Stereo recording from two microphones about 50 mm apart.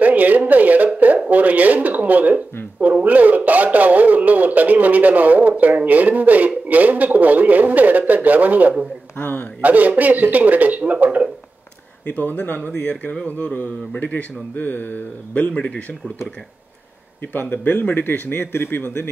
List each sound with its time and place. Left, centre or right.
0.0 s a sound: right
1.3 s speech: right
9.2 s a man's voice: left
9.6 s speech: right
12.1 s a man's voice: left
17.3 s a man's voice: left